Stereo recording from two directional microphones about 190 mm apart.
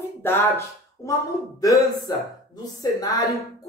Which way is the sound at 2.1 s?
20° left (ahead or behind).